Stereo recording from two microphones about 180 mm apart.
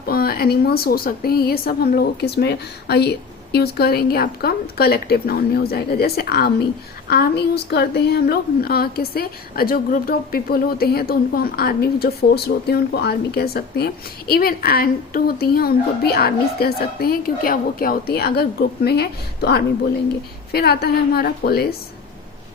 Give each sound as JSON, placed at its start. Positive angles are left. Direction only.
{"t": 0.0, "sound": "a woman's voice", "side_deg": 55}